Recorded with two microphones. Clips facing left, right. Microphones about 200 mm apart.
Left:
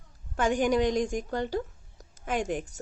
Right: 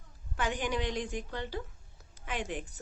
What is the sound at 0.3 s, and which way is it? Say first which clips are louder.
Speech: left 9 dB; 45° left (ahead or behind).